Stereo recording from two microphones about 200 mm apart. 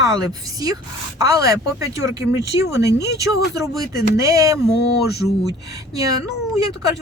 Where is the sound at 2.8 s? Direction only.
55° left (ahead or behind).